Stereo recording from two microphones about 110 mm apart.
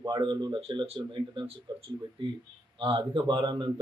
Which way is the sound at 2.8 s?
50° right (ahead or behind).